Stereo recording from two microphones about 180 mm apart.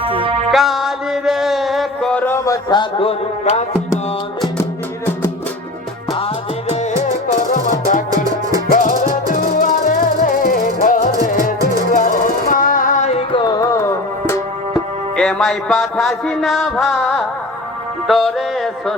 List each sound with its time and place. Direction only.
0.0 s music: 30° right (ahead or behind)
0.5 s a sound: centre (ahead or behind); by 3.2 s 25° left (ahead or behind)
6.1 s music: 35° left (ahead or behind)
7.3 s music: 45° left (ahead or behind)
8.1 s music: 20° right (ahead or behind)
8.7 s music: 50° left (ahead or behind)
13.3 s music: 25° left (ahead or behind)
15.1 s music: 5° left (ahead or behind)
18.1 s a sound: centre (ahead or behind)